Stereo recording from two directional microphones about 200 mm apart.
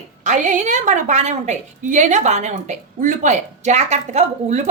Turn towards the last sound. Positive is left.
turn(degrees=-35)  # may be behind; listen again after turning